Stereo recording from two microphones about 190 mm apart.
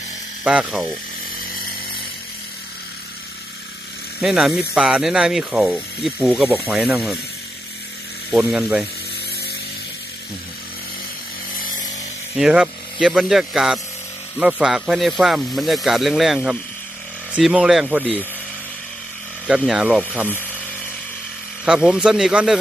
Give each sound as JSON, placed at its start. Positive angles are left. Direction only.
{"t": 0.4, "sound": "speech", "side_deg": -5}
{"t": 4.2, "sound": "speech", "side_deg": 0}
{"t": 8.5, "sound": "speech", "side_deg": 0}
{"t": 11.5, "sound": "a sound", "side_deg": 45}
{"t": 12.4, "sound": "speech", "side_deg": -5}
{"t": 19.5, "sound": "speech", "side_deg": 0}
{"t": 21.6, "sound": "speech", "side_deg": -5}